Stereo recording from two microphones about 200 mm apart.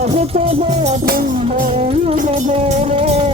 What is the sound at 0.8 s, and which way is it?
Music, 45° right (ahead or behind).